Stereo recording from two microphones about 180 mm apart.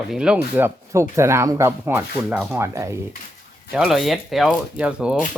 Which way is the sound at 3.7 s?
Centre (ahead or behind).